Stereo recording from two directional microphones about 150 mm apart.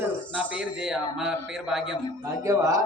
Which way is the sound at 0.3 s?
5° right (ahead or behind).